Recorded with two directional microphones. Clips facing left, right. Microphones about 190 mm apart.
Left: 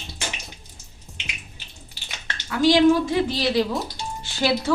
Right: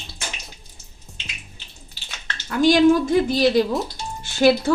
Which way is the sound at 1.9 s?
15° left (ahead or behind).